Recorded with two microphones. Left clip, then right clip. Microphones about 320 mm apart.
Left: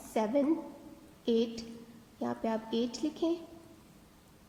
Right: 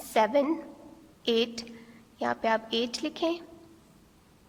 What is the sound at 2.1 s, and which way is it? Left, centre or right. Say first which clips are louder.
Speech: right 7 dB; right.